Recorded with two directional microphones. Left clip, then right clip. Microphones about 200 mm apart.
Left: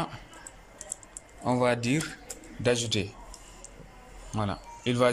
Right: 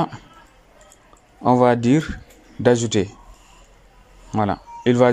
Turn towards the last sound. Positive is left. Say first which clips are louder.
# right 10 dB
turn(degrees=-35)  # may be behind; listen again after turning